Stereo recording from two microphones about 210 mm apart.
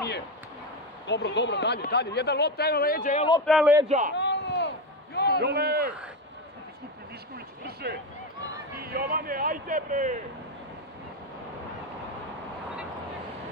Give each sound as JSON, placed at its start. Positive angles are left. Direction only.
{"t": 1.0, "sound": "speech", "side_deg": 55}
{"t": 3.4, "sound": "a man's voice", "side_deg": 0}
{"t": 4.1, "sound": "a sound", "side_deg": 55}
{"t": 5.4, "sound": "a man's voice", "side_deg": -50}
{"t": 7.6, "sound": "a sound", "side_deg": -50}
{"t": 8.8, "sound": "a man's voice", "side_deg": -45}